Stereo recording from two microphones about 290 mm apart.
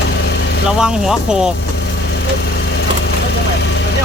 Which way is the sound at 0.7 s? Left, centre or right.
Centre.